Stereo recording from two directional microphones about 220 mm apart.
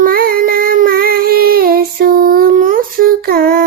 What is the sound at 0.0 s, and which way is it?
Child singing, 40° right (ahead or behind).